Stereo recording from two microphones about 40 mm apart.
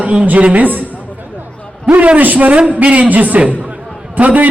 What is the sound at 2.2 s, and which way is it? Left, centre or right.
Speech, right.